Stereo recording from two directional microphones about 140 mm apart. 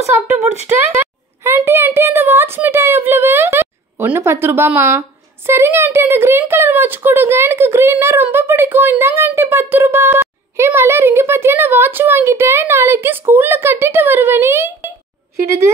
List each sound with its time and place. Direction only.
0.9 s a woman's voice: 15° right (ahead or behind)